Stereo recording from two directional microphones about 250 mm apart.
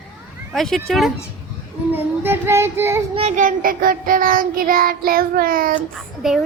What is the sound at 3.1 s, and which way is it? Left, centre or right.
Child singing, right.